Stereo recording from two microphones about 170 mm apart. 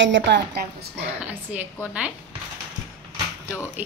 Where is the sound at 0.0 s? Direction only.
90° right.